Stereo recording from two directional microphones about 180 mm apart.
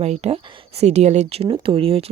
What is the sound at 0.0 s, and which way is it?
Speech, 35° right (ahead or behind).